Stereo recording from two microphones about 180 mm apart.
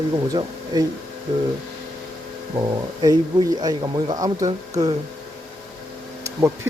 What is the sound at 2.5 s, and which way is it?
Speech, 20° right (ahead or behind).